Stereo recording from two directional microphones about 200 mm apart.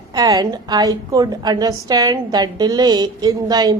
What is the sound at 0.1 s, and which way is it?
A woman's voice, 20° right (ahead or behind).